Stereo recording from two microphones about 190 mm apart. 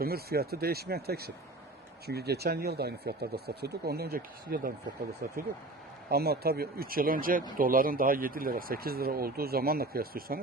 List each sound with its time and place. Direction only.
0.0 s a man's voice: 55° right (ahead or behind)